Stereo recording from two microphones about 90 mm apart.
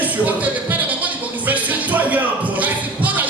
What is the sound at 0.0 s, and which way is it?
Music, 20° right (ahead or behind).